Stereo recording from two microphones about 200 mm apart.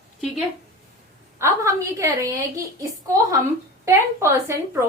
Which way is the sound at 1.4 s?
15° right (ahead or behind).